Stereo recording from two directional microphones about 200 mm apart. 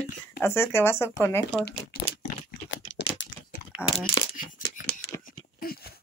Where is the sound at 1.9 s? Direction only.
50° left (ahead or behind).